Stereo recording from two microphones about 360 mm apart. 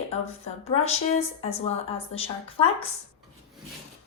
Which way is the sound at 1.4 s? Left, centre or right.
Centre.